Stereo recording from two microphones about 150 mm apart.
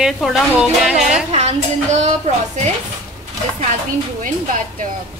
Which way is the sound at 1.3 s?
45° right (ahead or behind).